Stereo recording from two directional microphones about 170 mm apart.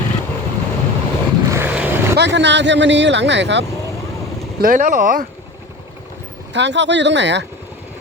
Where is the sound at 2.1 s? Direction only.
90° right.